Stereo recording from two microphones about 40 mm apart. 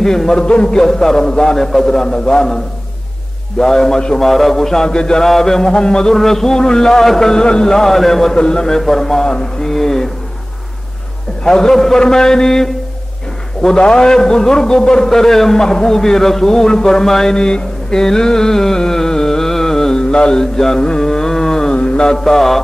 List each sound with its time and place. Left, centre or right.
0.0 s a man's voice: centre
0.4 s a man's voice: left
4.8 s a man's voice: centre
8.4 s a man's voice: centre
11.4 s a man's voice: centre
21.7 s mantra: left
22.1 s mantra: centre